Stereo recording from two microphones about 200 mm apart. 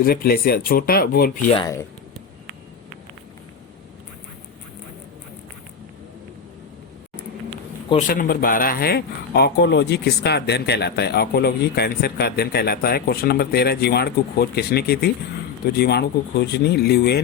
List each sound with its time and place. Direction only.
0.0 s speech: 50° left (ahead or behind)
1.5 s speech: 20° left (ahead or behind)
8.0 s speech: 45° left (ahead or behind)